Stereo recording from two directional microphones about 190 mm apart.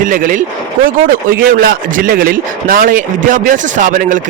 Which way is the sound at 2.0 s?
45° right (ahead or behind).